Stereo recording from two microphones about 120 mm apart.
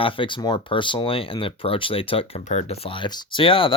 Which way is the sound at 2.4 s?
70° left (ahead or behind).